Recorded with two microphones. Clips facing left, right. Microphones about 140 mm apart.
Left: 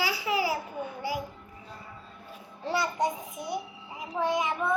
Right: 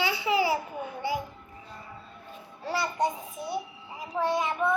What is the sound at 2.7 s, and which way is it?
A child's voice, 20° left (ahead or behind).